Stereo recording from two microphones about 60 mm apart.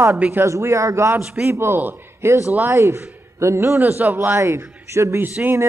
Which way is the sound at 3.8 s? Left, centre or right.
Right.